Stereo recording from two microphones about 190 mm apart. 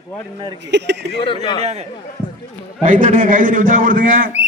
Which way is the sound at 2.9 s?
45° right (ahead or behind).